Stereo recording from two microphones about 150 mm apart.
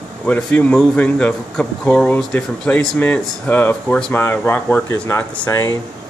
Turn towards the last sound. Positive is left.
turn(degrees=20)  # may be behind; listen again after turning